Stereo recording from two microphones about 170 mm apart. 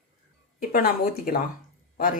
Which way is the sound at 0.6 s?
60° left (ahead or behind).